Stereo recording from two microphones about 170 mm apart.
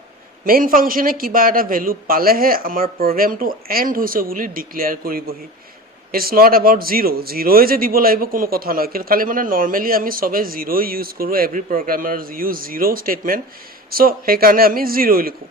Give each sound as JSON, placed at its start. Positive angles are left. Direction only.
{"t": 0.4, "sound": "a man's voice", "side_deg": -55}